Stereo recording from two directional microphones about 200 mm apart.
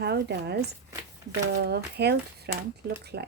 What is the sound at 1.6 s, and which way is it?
Speech, 55° right (ahead or behind).